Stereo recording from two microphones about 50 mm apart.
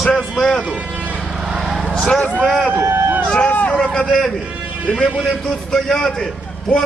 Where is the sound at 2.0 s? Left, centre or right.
Left.